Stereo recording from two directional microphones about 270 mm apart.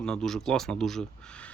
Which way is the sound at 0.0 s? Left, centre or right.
Centre.